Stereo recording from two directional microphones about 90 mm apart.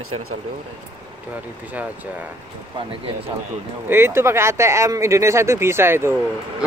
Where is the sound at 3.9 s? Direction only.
25° right (ahead or behind).